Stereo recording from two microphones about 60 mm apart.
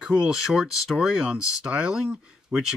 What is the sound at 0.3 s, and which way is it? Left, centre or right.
Speech, centre.